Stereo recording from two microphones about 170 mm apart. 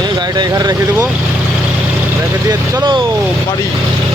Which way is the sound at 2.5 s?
25° right (ahead or behind).